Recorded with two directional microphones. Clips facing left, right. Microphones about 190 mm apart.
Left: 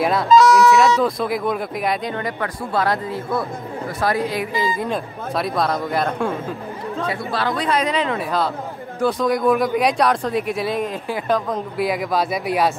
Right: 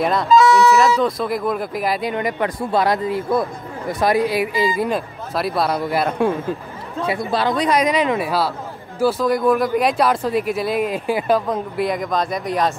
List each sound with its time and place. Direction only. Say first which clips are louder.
0.0 s speech: even; centre (ahead or behind)
2.1 s speech: right 4 dB; 15° right (ahead or behind); by 12.7 s 5° left (ahead or behind)